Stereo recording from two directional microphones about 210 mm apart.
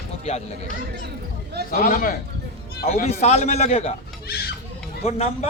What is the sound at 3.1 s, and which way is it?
Speech, 30° left (ahead or behind).